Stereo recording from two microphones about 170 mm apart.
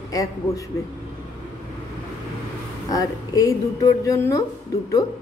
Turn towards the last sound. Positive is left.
turn(degrees=20)  # may be behind; listen again after turning